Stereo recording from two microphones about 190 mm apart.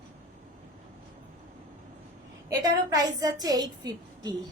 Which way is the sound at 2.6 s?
20° right (ahead or behind).